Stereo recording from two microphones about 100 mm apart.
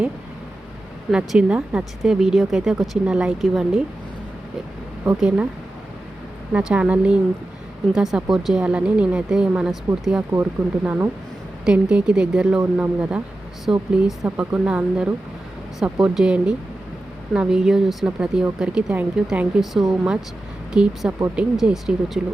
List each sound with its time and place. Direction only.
1.1 s speech: 10° right (ahead or behind)
5.1 s speech: 5° right (ahead or behind)
6.5 s speech: 10° right (ahead or behind)
14.3 s speech: 15° right (ahead or behind)